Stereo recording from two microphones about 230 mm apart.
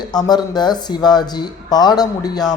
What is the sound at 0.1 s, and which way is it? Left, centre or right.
Speech, centre.